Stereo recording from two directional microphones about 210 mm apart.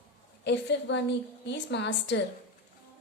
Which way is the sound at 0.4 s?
55° left (ahead or behind).